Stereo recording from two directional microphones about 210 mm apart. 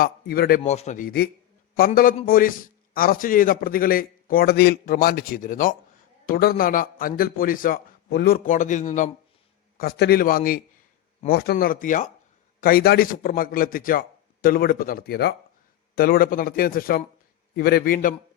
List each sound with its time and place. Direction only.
0.0 s a man's voice: 45° left (ahead or behind)
9.7 s a man's voice: 45° left (ahead or behind)